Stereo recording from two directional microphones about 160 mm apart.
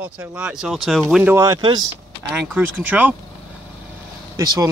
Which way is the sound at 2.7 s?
10° right (ahead or behind).